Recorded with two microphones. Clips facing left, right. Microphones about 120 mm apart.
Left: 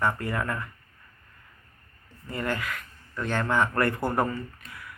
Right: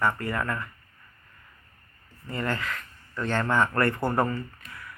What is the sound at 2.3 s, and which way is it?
Speech, 15° left (ahead or behind).